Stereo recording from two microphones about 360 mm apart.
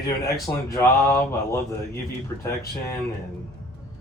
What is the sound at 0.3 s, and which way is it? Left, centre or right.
Speech, centre.